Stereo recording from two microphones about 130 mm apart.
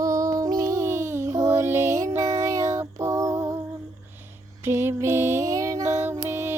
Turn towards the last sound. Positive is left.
turn(degrees=-20)  # may be behind; listen again after turning